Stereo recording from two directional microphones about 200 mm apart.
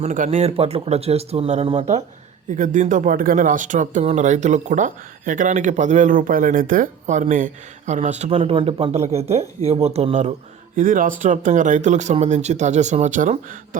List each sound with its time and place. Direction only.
0.0 s speech: 35° right (ahead or behind)